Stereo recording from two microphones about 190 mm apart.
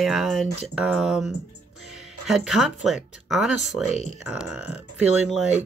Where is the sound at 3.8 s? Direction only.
40° right (ahead or behind).